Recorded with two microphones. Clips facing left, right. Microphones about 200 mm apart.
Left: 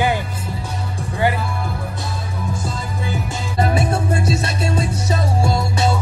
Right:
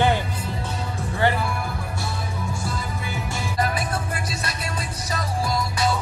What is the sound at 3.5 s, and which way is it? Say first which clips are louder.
Music: left 7 dB; 25° left (ahead or behind).